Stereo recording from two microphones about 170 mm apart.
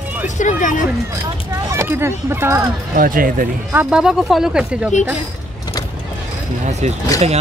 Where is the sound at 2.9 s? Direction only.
55° right (ahead or behind).